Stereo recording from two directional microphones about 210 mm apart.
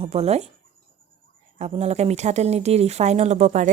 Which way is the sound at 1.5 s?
30° right (ahead or behind).